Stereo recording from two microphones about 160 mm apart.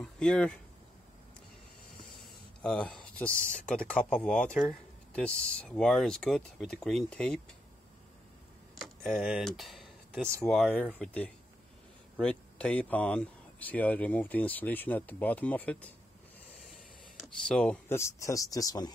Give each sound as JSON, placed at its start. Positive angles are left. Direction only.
{"t": 0.0, "sound": "speech", "side_deg": 5}
{"t": 2.2, "sound": "a sound", "side_deg": 5}
{"t": 3.6, "sound": "speech", "side_deg": 5}
{"t": 8.7, "sound": "speech", "side_deg": 0}
{"t": 17.5, "sound": "speech", "side_deg": 5}
{"t": 17.9, "sound": "speech", "side_deg": 20}